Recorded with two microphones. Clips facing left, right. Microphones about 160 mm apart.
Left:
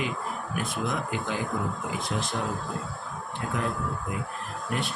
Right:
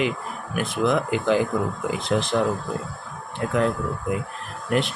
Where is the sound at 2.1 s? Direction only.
70° right (ahead or behind).